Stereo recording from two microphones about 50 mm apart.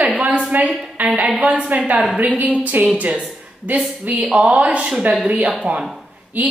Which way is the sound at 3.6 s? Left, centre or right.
Right.